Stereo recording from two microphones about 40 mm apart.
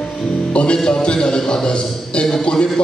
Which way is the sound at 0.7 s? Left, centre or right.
Centre.